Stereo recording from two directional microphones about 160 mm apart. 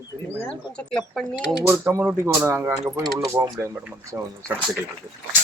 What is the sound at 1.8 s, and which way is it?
Speech, 15° right (ahead or behind).